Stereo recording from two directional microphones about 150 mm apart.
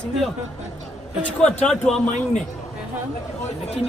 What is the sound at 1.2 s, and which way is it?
Speech, 5° left (ahead or behind).